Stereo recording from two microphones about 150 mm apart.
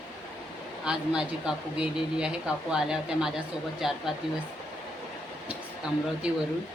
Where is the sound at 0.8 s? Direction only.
5° right (ahead or behind).